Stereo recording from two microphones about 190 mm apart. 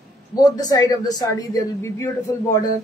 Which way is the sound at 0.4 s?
20° left (ahead or behind).